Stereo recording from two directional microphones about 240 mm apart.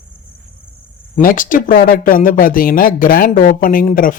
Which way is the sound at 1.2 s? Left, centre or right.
Left.